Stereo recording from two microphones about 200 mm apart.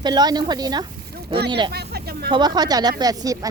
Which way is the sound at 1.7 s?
55° right (ahead or behind).